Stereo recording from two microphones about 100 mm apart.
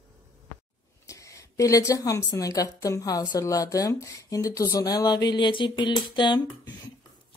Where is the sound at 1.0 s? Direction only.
35° left (ahead or behind).